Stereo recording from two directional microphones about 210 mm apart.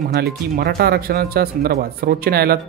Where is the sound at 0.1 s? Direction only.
50° right (ahead or behind).